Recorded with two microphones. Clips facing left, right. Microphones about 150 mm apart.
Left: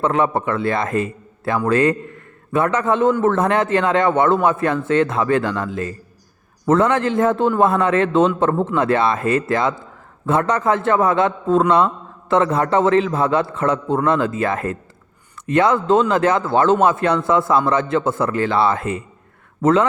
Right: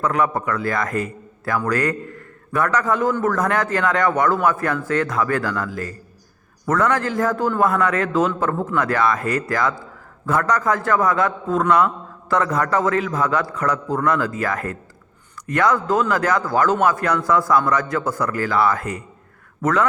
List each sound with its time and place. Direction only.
0.0 s a man's voice: 25° left (ahead or behind)